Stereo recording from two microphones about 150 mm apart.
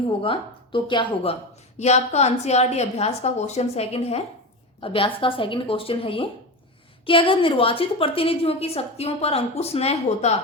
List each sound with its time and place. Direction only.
0.2 s a woman's voice: 35° left (ahead or behind)
1.8 s a woman's voice: 45° left (ahead or behind)